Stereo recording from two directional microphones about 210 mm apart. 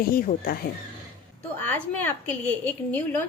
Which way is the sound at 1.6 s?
10° left (ahead or behind).